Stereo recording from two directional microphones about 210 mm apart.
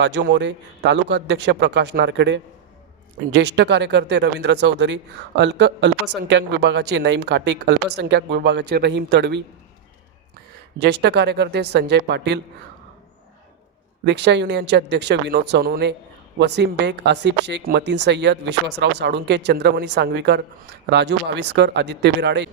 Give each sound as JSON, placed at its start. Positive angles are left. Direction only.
{"t": 0.0, "sound": "speech", "side_deg": -55}
{"t": 10.8, "sound": "speech", "side_deg": -50}
{"t": 14.0, "sound": "speech", "side_deg": -55}